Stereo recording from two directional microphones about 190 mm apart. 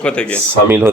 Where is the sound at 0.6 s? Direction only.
10° right (ahead or behind).